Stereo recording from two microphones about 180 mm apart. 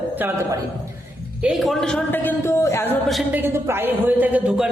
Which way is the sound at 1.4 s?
Centre (ahead or behind).